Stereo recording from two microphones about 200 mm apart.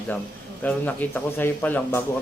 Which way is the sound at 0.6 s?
10° left (ahead or behind).